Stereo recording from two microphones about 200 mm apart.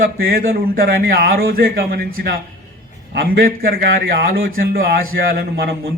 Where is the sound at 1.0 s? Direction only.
45° right (ahead or behind).